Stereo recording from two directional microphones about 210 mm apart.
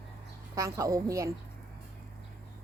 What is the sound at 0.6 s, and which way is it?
Speech, 15° right (ahead or behind).